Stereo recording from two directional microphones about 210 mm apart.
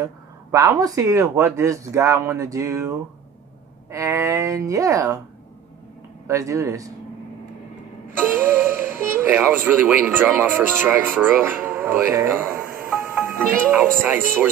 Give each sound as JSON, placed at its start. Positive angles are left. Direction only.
{"t": 0.0, "sound": "speech", "side_deg": -15}
{"t": 3.9, "sound": "speech", "side_deg": -15}
{"t": 6.2, "sound": "speech", "side_deg": -15}
{"t": 8.2, "sound": "speech", "side_deg": -10}